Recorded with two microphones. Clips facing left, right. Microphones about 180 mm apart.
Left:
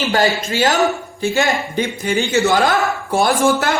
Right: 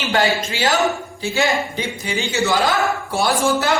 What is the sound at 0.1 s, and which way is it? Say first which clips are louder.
Speech: right 1 dB; 40° left (ahead or behind).